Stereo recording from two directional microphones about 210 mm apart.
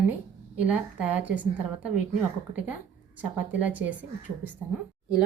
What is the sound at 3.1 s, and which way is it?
Speech, 5° right (ahead or behind).